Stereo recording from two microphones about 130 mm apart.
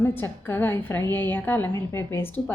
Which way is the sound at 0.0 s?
15° left (ahead or behind).